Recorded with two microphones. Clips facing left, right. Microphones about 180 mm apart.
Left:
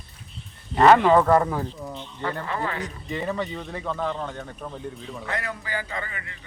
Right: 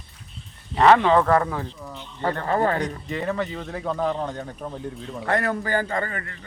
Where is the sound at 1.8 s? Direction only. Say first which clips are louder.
Left 3 dB; 20° left (ahead or behind).